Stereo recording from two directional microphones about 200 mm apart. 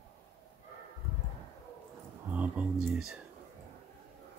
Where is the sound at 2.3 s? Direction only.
5° right (ahead or behind).